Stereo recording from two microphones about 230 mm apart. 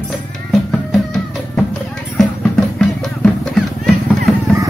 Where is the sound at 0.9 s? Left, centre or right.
Centre.